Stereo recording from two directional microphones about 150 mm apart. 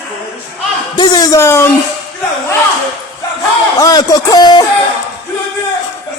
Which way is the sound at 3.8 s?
25° left (ahead or behind).